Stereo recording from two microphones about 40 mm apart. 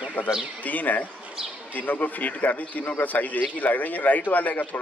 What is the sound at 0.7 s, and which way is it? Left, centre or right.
A man's voice, left.